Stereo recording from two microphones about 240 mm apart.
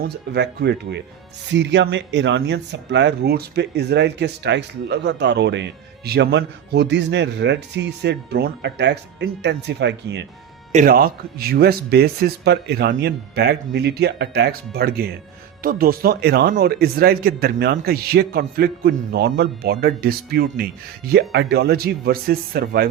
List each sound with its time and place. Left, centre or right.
0.0 s speech: right
10.7 s speech: right